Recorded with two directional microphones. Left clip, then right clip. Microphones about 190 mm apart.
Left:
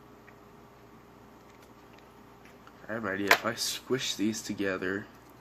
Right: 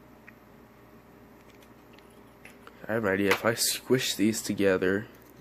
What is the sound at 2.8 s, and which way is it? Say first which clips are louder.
Speech: right 1 dB; 45° right (ahead or behind).